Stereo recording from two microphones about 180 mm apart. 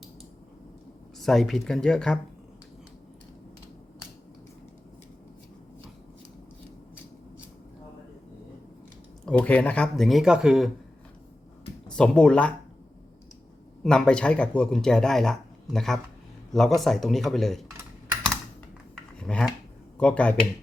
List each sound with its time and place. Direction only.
1.2 s speech: centre (ahead or behind)
9.2 s speech: 10° left (ahead or behind)
11.9 s speech: 5° left (ahead or behind)
13.8 s speech: 5° left (ahead or behind)
19.2 s speech: 5° left (ahead or behind)